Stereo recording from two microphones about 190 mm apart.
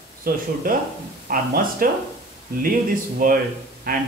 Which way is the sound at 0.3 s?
50° right (ahead or behind).